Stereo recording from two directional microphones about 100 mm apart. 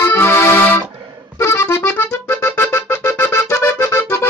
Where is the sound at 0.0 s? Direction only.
20° left (ahead or behind).